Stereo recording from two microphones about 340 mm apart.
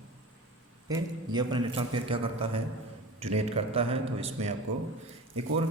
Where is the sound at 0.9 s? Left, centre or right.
Centre.